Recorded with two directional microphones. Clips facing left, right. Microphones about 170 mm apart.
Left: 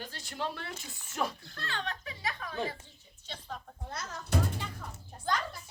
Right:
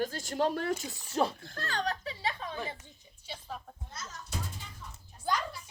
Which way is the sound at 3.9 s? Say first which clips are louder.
Left 8 dB; 65° left (ahead or behind).